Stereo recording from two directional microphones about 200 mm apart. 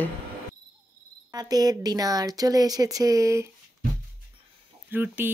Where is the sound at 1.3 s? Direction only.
20° right (ahead or behind).